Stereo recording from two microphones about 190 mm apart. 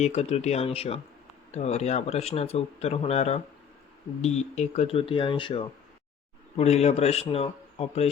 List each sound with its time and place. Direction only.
0.0 s speech: 35° left (ahead or behind)